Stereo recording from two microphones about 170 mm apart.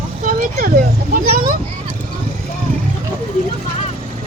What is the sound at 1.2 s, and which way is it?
Speech, 60° right (ahead or behind).